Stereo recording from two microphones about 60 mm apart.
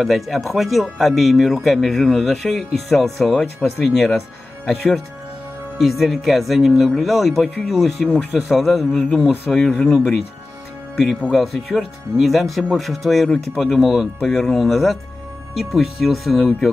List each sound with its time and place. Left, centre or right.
0.0 s speech: centre
8.9 s speech: centre
11.3 s speech: centre